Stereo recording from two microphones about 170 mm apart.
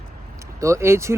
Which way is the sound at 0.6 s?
15° right (ahead or behind).